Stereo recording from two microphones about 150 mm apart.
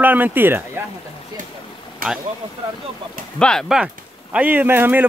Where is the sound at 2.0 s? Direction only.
70° right (ahead or behind).